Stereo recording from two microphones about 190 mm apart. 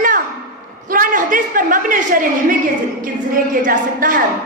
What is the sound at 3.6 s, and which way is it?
Speech, 45° right (ahead or behind).